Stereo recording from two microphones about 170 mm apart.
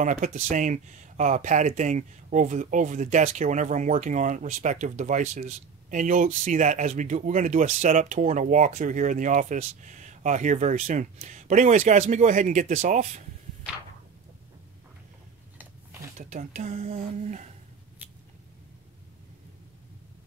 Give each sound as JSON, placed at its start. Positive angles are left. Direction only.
{"t": 0.0, "sound": "speech", "side_deg": -50}
{"t": 16.2, "sound": "speech", "side_deg": -45}